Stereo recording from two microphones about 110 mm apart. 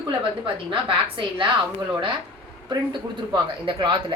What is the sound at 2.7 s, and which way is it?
Speech, 45° right (ahead or behind).